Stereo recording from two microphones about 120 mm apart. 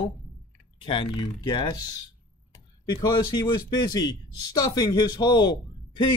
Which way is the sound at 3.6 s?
35° left (ahead or behind).